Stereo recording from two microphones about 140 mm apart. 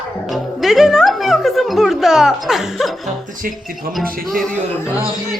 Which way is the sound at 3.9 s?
Centre (ahead or behind).